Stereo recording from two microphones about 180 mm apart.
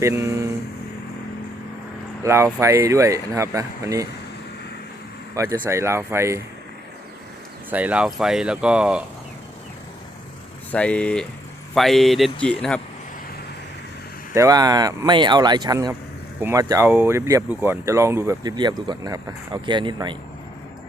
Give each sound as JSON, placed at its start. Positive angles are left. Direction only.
{"t": 0.0, "sound": "speech", "side_deg": -15}
{"t": 2.2, "sound": "speech", "side_deg": -15}
{"t": 5.3, "sound": "speech", "side_deg": -20}
{"t": 7.7, "sound": "speech", "side_deg": -10}
{"t": 10.7, "sound": "speech", "side_deg": 5}
{"t": 14.3, "sound": "speech", "side_deg": -20}